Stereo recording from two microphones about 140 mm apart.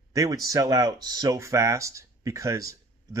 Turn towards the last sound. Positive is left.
turn(degrees=-20)  # may be behind; listen again after turning